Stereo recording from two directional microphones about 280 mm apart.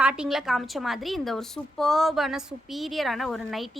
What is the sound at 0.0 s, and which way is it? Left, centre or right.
A woman's voice, centre.